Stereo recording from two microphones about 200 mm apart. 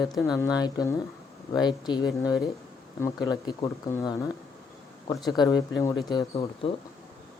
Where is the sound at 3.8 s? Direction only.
20° left (ahead or behind).